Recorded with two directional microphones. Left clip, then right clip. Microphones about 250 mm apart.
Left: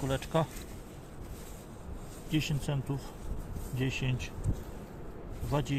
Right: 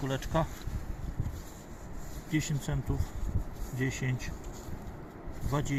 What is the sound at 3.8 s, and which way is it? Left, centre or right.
Speech, centre.